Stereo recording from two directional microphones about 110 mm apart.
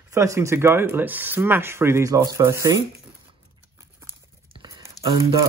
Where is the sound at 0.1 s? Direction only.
25° right (ahead or behind).